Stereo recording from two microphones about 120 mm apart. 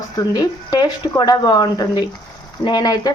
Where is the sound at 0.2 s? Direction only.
35° left (ahead or behind).